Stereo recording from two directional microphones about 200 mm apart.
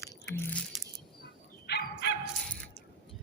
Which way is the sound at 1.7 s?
55° left (ahead or behind).